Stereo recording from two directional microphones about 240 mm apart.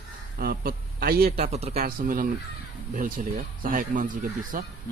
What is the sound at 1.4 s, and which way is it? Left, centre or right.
Speech, right.